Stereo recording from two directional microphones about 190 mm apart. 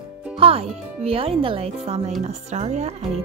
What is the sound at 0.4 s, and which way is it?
Speech, 30° right (ahead or behind).